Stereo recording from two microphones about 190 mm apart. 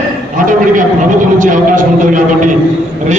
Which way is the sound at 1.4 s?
45° right (ahead or behind).